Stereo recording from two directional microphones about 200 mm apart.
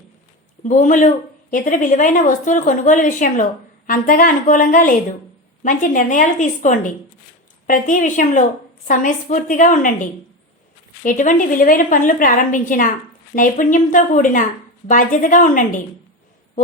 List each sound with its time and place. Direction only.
0.7 s a woman's voice: 40° left (ahead or behind)